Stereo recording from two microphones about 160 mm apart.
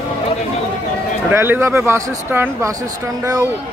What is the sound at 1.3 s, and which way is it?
Speech, 15° right (ahead or behind).